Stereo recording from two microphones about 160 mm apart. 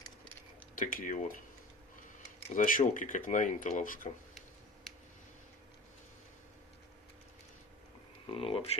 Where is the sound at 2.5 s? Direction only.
55° left (ahead or behind).